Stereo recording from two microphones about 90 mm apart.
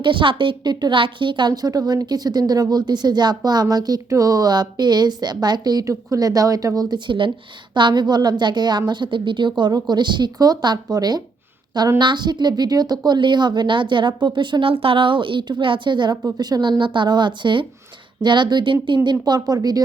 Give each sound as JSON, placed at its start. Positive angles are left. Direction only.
{"t": 0.0, "sound": "a woman's voice", "side_deg": -65}
{"t": 19.2, "sound": "a woman's voice", "side_deg": -45}